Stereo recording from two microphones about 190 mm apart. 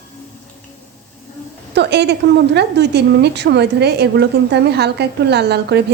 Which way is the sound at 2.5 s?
60° right (ahead or behind).